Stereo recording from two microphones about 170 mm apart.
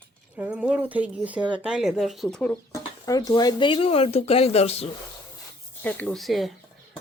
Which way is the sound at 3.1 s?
20° left (ahead or behind).